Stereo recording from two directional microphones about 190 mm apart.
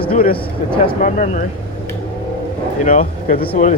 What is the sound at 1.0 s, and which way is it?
Speech, 40° left (ahead or behind).